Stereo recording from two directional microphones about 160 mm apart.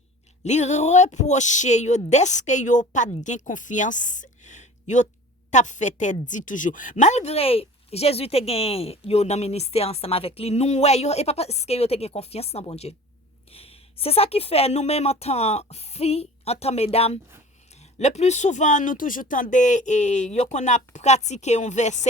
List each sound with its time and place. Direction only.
0.4 s a woman's voice: 45° left (ahead or behind)